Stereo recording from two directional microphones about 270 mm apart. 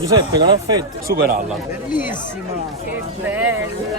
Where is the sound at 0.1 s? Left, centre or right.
Centre.